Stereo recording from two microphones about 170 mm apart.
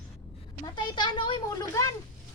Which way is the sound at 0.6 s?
25° left (ahead or behind).